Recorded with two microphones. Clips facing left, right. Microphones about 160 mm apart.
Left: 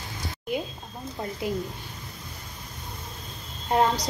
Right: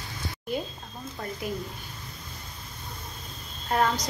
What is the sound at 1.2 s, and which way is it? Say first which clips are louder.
Speech: left 3 dB; 20° left (ahead or behind).